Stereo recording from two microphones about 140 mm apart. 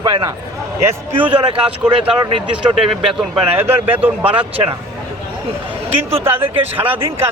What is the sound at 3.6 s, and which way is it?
Speech, 15° right (ahead or behind).